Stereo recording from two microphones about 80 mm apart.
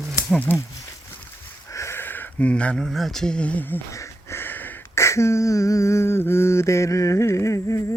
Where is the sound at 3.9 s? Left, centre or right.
Left.